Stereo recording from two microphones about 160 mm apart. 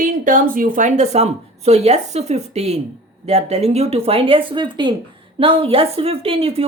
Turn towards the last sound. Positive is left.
turn(degrees=-40)  # may be behind; listen again after turning